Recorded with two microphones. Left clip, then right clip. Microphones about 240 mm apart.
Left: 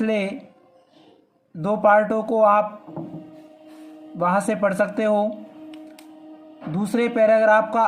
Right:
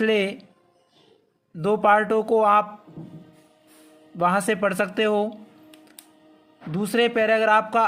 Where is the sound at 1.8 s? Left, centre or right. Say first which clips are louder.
Left 3 dB; right.